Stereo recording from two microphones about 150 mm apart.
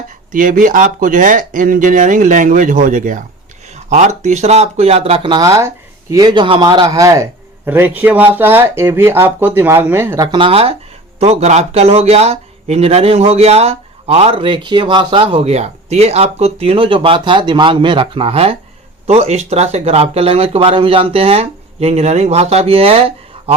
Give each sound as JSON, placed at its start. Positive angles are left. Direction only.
{"t": 0.3, "sound": "speech", "side_deg": -60}
{"t": 5.5, "sound": "speech", "side_deg": -20}
{"t": 10.3, "sound": "speech", "side_deg": -35}